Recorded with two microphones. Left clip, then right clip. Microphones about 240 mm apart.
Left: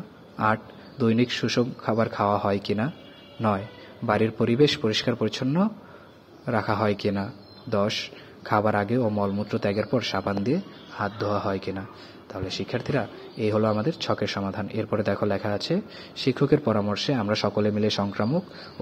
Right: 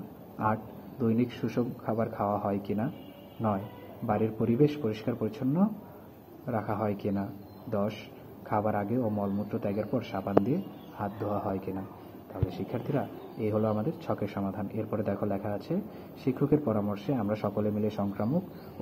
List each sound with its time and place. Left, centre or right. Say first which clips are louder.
0.4 s a man's voice: left 6 dB; left
8.5 s a man's voice: left 7 dB; left